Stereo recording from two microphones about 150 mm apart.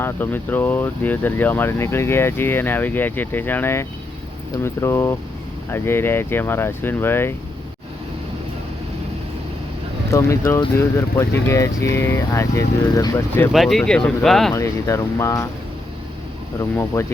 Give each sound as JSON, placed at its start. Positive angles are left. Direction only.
{"t": 0.0, "sound": "speech", "side_deg": 15}
{"t": 10.1, "sound": "speech", "side_deg": 20}
{"t": 13.5, "sound": "speech", "side_deg": 0}
{"t": 14.5, "sound": "speech", "side_deg": 20}
{"t": 16.6, "sound": "speech", "side_deg": 20}